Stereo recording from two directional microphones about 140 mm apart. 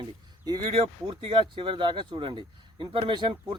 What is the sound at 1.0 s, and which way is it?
Speech, 35° right (ahead or behind).